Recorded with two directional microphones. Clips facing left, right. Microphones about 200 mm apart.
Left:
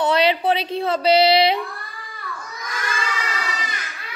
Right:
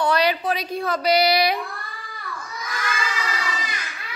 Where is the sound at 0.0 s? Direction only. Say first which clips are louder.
Left 3 dB; 25° left (ahead or behind).